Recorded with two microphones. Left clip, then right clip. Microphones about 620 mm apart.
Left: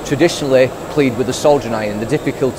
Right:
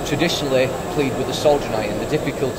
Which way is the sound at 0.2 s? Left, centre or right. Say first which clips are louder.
Left 7 dB; left.